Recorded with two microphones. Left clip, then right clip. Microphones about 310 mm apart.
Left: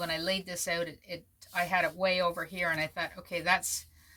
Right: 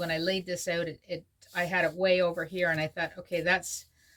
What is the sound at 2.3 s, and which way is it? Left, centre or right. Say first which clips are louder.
Speech: right 2 dB; left.